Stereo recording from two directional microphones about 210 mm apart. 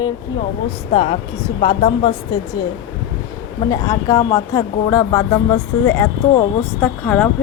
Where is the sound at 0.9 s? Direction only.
30° left (ahead or behind).